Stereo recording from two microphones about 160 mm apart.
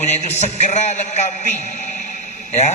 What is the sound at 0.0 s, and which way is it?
A man's voice, 45° left (ahead or behind).